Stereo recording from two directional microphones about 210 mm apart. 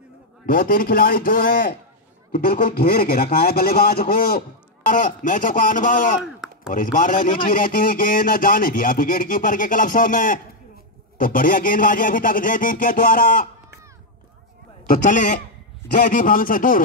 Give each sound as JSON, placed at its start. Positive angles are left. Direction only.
{"t": 0.5, "sound": "speech", "side_deg": 40}
{"t": 14.9, "sound": "speech", "side_deg": 40}